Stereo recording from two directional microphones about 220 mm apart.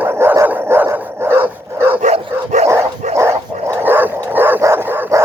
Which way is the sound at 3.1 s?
15° right (ahead or behind).